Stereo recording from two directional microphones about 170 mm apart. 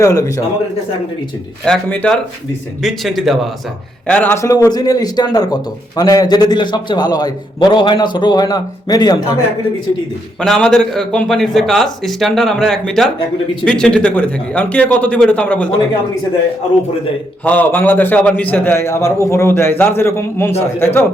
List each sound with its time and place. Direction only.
0.0 s a man's voice: 20° left (ahead or behind)
1.6 s a man's voice: 5° left (ahead or behind); by 9.1 s 25° left (ahead or behind)
10.4 s a man's voice: centre (ahead or behind)
17.4 s speech: 10° left (ahead or behind)